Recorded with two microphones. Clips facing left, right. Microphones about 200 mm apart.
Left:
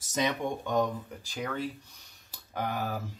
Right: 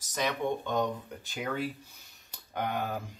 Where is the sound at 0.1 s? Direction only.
20° left (ahead or behind).